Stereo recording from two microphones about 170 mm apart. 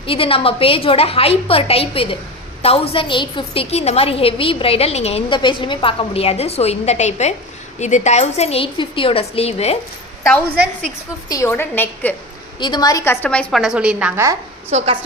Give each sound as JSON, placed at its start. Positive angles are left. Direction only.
{"t": 0.0, "sound": "a woman's voice", "side_deg": 30}
{"t": 11.3, "sound": "a woman's voice", "side_deg": 15}
{"t": 12.5, "sound": "a woman's voice", "side_deg": 25}
{"t": 13.2, "sound": "a woman's voice", "side_deg": 10}
{"t": 14.7, "sound": "a woman's voice", "side_deg": -40}